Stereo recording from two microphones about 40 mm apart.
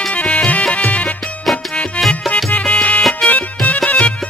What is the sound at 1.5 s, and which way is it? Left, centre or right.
Music, centre.